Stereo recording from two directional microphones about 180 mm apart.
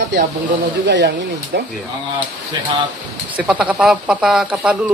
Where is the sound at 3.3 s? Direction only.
5° right (ahead or behind).